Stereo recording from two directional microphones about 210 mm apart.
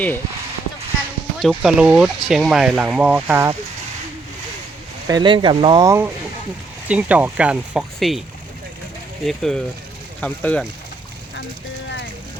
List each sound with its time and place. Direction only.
1.4 s speech: centre (ahead or behind)
5.0 s speech: 20° right (ahead or behind); by 8.2 s centre (ahead or behind)
9.2 s speech: centre (ahead or behind)